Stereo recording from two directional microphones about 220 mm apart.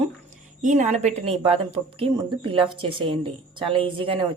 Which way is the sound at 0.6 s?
35° right (ahead or behind).